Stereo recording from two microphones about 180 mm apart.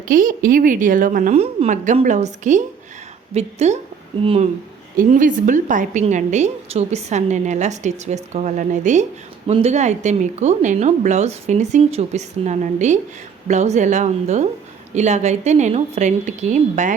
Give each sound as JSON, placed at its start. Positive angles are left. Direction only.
{"t": 0.1, "sound": "a woman's voice", "side_deg": -50}
{"t": 4.9, "sound": "a woman's voice", "side_deg": -45}